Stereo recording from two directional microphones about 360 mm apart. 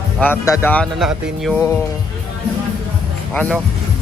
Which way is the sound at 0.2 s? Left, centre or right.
Centre.